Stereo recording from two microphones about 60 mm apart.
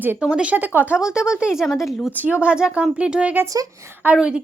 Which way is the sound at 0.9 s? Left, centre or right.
Centre.